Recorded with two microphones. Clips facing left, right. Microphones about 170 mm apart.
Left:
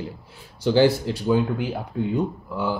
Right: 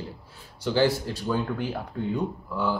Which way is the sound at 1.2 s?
15° left (ahead or behind).